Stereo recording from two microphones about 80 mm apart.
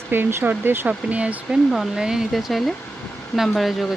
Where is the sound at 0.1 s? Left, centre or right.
Right.